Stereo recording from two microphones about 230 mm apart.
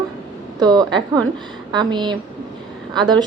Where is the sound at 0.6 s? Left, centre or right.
Centre.